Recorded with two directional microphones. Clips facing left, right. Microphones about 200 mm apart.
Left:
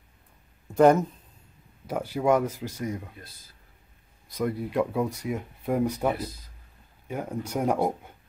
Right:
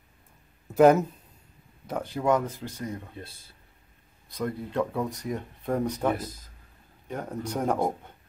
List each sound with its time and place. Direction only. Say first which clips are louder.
0.7 s speech: even; 5° right (ahead or behind)
1.9 s speech: left 2 dB; 10° left (ahead or behind)
3.2 s speech: right 6 dB; 25° right (ahead or behind)
4.3 s speech: left 3 dB; 10° left (ahead or behind)
6.1 s speech: even; 45° right (ahead or behind)
7.1 s speech: left 1 dB; 10° left (ahead or behind)